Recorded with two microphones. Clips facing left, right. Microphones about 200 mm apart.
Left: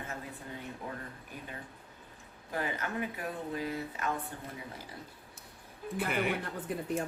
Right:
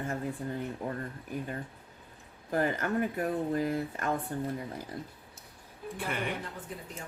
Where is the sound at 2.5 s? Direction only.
45° right (ahead or behind).